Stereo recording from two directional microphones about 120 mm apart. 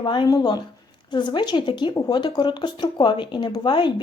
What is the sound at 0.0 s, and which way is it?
Speech, 40° left (ahead or behind).